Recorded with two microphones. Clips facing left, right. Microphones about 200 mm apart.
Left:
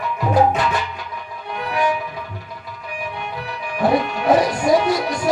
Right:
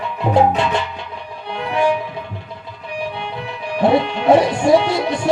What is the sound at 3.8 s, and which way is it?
Music, 25° right (ahead or behind).